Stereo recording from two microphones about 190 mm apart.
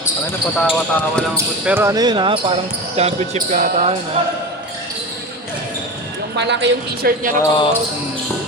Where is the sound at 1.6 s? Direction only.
10° right (ahead or behind); by 3.9 s 40° right (ahead or behind).